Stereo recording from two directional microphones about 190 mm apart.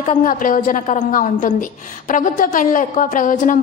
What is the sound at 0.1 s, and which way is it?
A woman's voice, 45° left (ahead or behind).